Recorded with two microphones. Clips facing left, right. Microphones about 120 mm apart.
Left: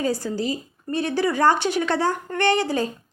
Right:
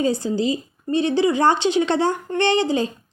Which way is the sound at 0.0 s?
20° right (ahead or behind).